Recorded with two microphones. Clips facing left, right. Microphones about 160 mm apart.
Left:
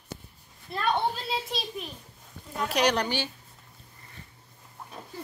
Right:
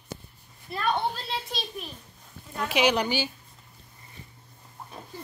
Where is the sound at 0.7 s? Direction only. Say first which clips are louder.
Even; centre (ahead or behind).